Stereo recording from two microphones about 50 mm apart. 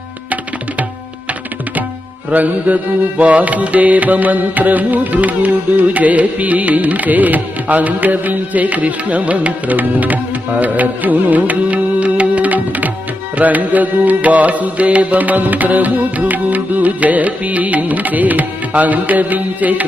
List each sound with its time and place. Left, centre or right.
2.3 s music: right